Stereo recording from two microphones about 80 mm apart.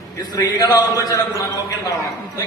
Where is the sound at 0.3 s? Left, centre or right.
Left.